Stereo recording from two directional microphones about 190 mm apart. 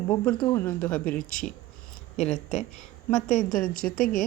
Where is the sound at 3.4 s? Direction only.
40° left (ahead or behind).